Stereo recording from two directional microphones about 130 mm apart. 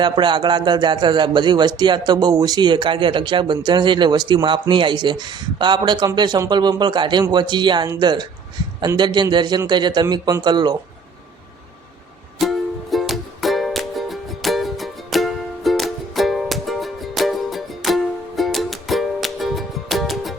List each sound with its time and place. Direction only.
0.0 s speech: 35° right (ahead or behind)
12.4 s music: centre (ahead or behind)